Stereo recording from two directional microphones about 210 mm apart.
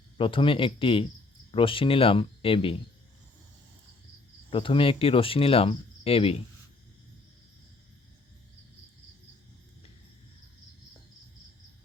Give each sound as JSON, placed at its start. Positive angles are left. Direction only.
{"t": 0.2, "sound": "cricket", "side_deg": 25}
{"t": 4.5, "sound": "cricket", "side_deg": 25}